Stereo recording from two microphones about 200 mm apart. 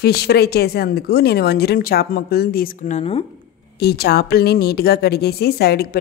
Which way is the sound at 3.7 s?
55° left (ahead or behind).